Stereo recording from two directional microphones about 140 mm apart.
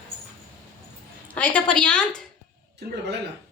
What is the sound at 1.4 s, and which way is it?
Speech, 10° left (ahead or behind).